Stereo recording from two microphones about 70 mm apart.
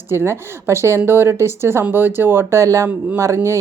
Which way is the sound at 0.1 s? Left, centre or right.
Right.